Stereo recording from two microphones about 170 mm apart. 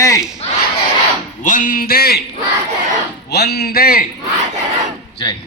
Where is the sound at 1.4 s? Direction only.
50° left (ahead or behind).